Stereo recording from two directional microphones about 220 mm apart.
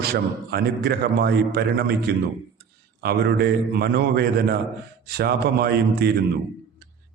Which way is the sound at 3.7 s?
45° right (ahead or behind).